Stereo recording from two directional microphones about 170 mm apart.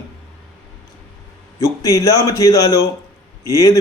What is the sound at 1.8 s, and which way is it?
A man's voice, 20° left (ahead or behind).